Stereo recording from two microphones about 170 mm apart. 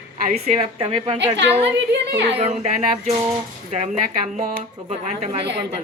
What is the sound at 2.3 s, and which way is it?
Speech, 40° right (ahead or behind).